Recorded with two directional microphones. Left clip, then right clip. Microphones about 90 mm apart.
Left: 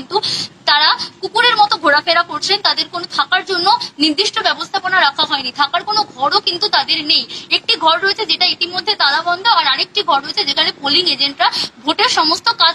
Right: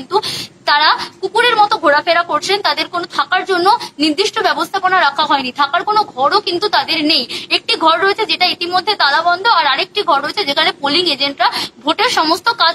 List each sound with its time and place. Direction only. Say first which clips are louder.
0.1 s a woman's voice: right 1 dB; 35° right (ahead or behind)